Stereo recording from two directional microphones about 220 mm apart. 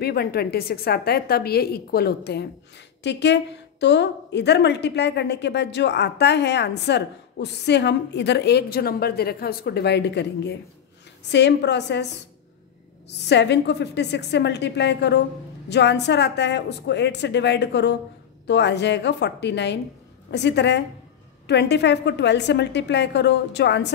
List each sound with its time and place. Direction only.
0.0 s a woman's voice: 45° left (ahead or behind)
13.3 s a woman's voice: 50° left (ahead or behind)